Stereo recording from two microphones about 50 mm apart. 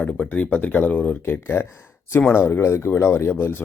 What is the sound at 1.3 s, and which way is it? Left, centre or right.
Speech, left.